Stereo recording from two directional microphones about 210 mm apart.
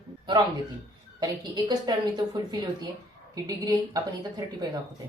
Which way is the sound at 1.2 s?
20° right (ahead or behind).